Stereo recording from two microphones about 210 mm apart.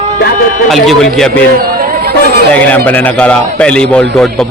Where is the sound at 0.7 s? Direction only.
Centre (ahead or behind).